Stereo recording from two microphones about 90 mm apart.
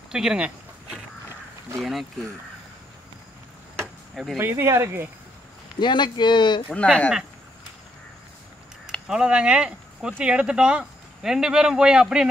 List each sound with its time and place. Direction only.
0.1 s a sound: 10° right (ahead or behind)
1.8 s speech: centre (ahead or behind)
4.1 s speech: centre (ahead or behind)
4.4 s speech: 25° right (ahead or behind)
5.8 s speech: 60° left (ahead or behind)
6.7 s speech: 15° left (ahead or behind)
9.0 s speech: 10° right (ahead or behind)